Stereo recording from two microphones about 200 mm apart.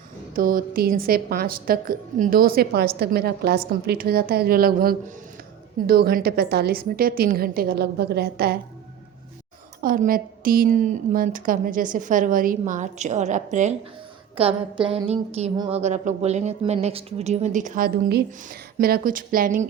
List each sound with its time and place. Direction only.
0.3 s a woman's voice: 45° right (ahead or behind)
9.8 s a woman's voice: 45° right (ahead or behind)
15.5 s a woman's voice: 20° right (ahead or behind)
15.8 s a woman's voice: 35° right (ahead or behind)